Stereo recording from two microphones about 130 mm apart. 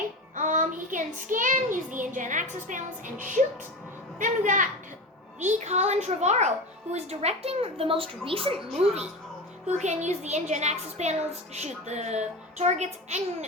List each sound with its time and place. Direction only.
0.3 s child singing: 75° right (ahead or behind)
2.0 s a woman's voice: 80° right
5.4 s a woman's voice: 65° right (ahead or behind); by 9.0 s 45° right (ahead or behind)
9.6 s a woman's voice: 60° right (ahead or behind)